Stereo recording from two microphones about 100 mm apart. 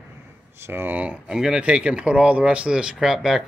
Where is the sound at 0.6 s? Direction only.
20° right (ahead or behind).